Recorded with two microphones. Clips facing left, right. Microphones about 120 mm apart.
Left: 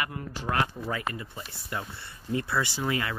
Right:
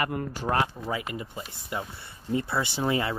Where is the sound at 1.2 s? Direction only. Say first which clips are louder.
Right 3 dB; 15° right (ahead or behind).